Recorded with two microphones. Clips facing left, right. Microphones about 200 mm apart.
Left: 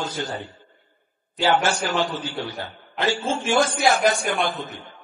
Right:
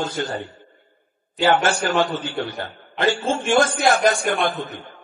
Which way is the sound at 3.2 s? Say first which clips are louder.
Right 2 dB; centre (ahead or behind).